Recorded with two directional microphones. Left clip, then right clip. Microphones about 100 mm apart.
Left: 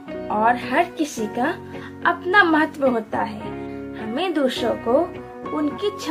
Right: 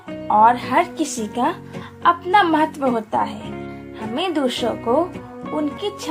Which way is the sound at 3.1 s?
50° right (ahead or behind).